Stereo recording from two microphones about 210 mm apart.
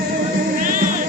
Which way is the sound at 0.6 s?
40° right (ahead or behind).